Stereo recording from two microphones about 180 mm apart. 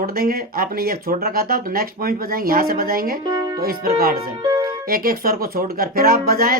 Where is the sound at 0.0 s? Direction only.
55° right (ahead or behind).